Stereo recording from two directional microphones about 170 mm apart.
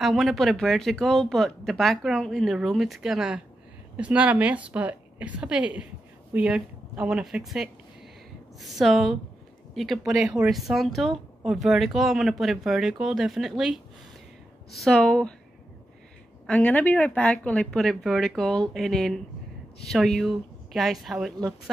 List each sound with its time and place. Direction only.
0.0 s a woman's voice: centre (ahead or behind)
16.4 s speech: 10° left (ahead or behind)